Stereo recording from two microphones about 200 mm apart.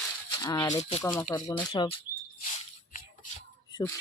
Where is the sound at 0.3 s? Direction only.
20° left (ahead or behind).